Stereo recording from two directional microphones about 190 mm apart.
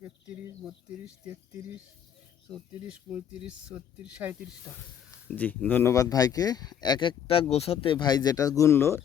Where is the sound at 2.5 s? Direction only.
Centre (ahead or behind).